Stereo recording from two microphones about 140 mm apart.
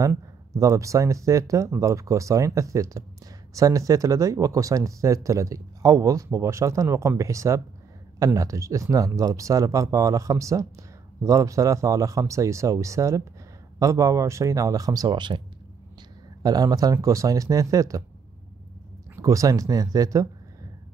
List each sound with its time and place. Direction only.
0.0 s speech: 20° right (ahead or behind)
16.4 s speech: 25° right (ahead or behind)
19.1 s speech: 25° right (ahead or behind)